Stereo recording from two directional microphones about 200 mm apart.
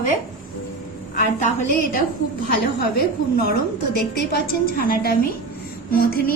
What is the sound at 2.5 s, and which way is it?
Speech, 55° left (ahead or behind).